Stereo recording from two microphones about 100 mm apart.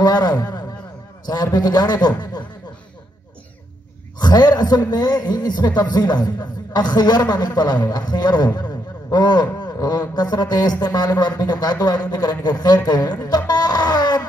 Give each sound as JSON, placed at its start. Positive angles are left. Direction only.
{"t": 0.0, "sound": "a man's voice", "side_deg": 45}
{"t": 4.2, "sound": "a man's voice", "side_deg": 45}
{"t": 13.2, "sound": "music", "side_deg": 45}